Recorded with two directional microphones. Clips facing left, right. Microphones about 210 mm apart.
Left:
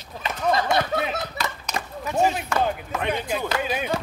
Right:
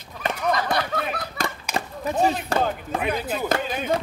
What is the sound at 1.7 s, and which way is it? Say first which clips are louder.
Chop: right 1 dB; 30° right (ahead or behind).